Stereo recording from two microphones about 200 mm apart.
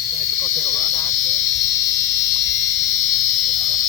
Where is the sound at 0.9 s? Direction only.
15° left (ahead or behind).